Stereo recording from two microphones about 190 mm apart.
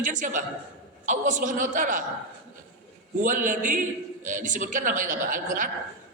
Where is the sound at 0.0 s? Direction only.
40° right (ahead or behind).